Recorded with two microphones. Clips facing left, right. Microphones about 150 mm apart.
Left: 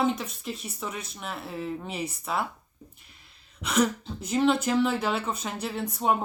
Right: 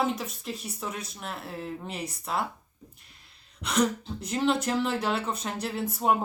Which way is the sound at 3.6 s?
Centre (ahead or behind).